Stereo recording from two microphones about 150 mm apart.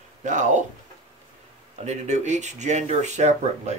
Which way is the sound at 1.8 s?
50° right (ahead or behind).